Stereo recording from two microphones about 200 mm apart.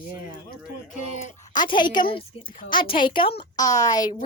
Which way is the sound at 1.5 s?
25° left (ahead or behind).